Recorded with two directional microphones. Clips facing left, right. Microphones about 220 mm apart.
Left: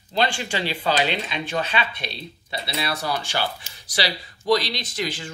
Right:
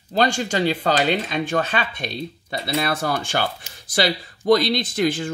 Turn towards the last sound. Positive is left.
turn(degrees=-50)  # may be behind; listen again after turning